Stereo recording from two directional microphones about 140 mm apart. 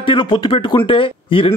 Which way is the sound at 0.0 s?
35° left (ahead or behind).